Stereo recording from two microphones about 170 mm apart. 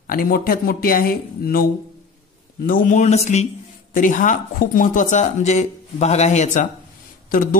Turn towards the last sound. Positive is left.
turn(degrees=55)  # may be behind; listen again after turning